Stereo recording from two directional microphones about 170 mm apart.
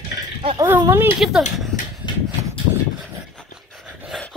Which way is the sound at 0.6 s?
15° right (ahead or behind).